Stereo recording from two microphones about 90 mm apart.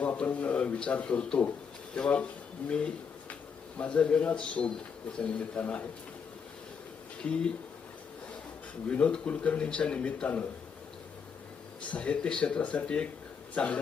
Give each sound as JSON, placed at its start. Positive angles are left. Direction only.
{"t": 0.0, "sound": "a man's voice", "side_deg": 15}
{"t": 7.2, "sound": "a man's voice", "side_deg": 10}
{"t": 8.9, "sound": "a man's voice", "side_deg": 10}
{"t": 11.9, "sound": "a man's voice", "side_deg": 10}